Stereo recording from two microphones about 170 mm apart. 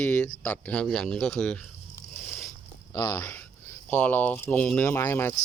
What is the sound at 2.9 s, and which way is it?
Speech, 15° left (ahead or behind).